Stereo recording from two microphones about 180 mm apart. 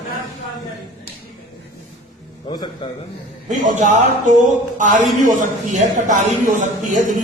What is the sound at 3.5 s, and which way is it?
A man's voice, 45° right (ahead or behind).